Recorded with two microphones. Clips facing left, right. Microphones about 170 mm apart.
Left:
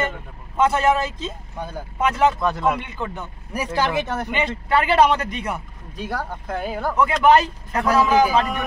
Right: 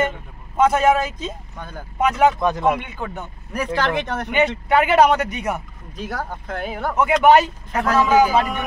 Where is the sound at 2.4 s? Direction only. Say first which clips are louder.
Right 2 dB; 15° right (ahead or behind).